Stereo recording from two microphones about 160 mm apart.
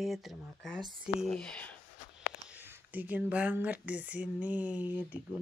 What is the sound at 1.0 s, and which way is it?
Speech, 5° left (ahead or behind).